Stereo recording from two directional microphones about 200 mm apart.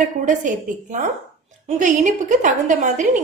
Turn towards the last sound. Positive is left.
turn(degrees=-40)  # may be behind; listen again after turning